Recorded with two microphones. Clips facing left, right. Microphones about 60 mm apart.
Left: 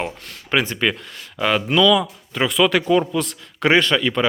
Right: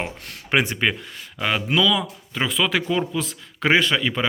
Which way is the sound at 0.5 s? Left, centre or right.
Centre.